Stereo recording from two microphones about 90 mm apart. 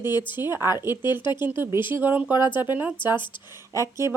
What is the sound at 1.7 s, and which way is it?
Speech, 60° left (ahead or behind).